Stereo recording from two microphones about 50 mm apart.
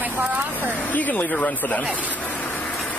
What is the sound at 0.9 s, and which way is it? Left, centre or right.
Speech, left.